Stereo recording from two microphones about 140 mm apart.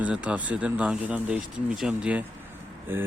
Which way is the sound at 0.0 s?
10° right (ahead or behind).